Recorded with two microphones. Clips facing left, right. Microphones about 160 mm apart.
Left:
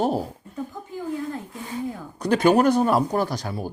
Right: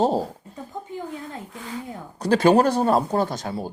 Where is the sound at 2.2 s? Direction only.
30° right (ahead or behind).